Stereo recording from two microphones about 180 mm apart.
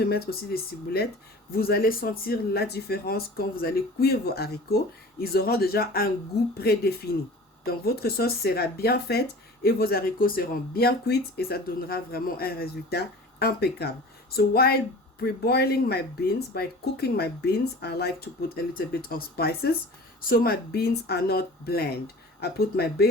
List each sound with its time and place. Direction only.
0.0 s speech: 60° left (ahead or behind)